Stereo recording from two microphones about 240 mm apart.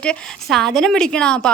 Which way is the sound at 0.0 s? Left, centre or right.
Centre.